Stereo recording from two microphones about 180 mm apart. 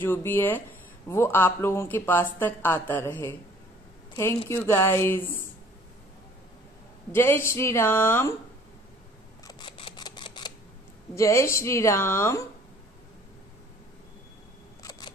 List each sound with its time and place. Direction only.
0.0 s speech: 10° left (ahead or behind)
4.5 s speech: 15° left (ahead or behind)
7.1 s speech: 10° left (ahead or behind)
9.4 s camera: 25° left (ahead or behind)
11.1 s speech: 15° left (ahead or behind)
14.8 s single-lens reflex camera: 20° left (ahead or behind)